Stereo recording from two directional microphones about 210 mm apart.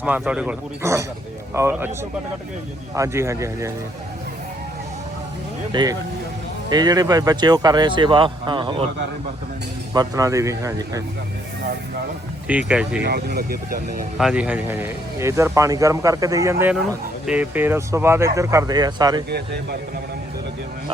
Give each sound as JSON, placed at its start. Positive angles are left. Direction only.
{"t": 0.0, "sound": "speech", "side_deg": -5}
{"t": 2.9, "sound": "speech", "side_deg": -15}
{"t": 5.7, "sound": "speech", "side_deg": -20}
{"t": 9.9, "sound": "speech", "side_deg": -15}
{"t": 12.5, "sound": "speech", "side_deg": -5}
{"t": 13.0, "sound": "speech", "side_deg": -50}
{"t": 14.2, "sound": "speech", "side_deg": -5}